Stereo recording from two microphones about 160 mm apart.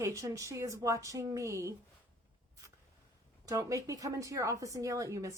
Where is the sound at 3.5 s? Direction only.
20° right (ahead or behind).